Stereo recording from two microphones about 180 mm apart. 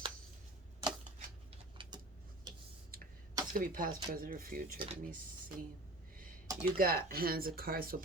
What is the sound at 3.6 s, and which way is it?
Speech, 50° right (ahead or behind).